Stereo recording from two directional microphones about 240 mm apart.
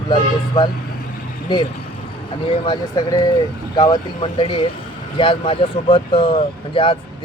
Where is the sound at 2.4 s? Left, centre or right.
Left.